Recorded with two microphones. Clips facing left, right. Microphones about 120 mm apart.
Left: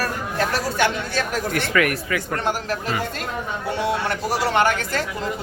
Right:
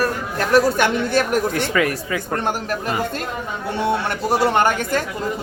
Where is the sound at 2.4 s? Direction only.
50° right (ahead or behind).